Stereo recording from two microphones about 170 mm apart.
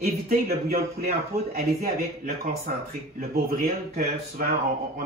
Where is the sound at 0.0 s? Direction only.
60° right (ahead or behind).